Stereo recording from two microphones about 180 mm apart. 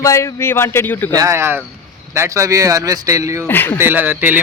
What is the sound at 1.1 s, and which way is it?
Speech, 15° right (ahead or behind).